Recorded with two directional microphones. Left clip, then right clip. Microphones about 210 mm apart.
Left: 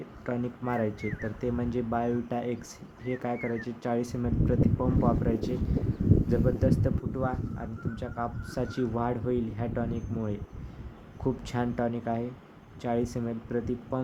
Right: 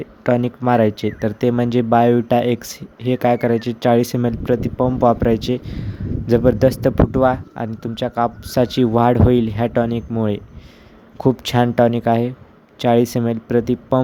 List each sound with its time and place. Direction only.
0.3 s speech: 45° right (ahead or behind)